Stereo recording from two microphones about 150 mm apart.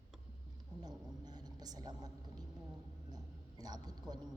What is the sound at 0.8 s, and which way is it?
A woman's voice, 25° right (ahead or behind).